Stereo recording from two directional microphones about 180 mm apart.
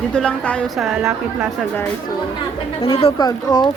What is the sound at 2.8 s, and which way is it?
Speech, 30° left (ahead or behind).